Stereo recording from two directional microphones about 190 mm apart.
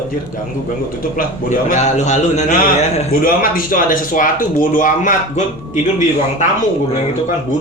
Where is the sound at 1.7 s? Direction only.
35° left (ahead or behind).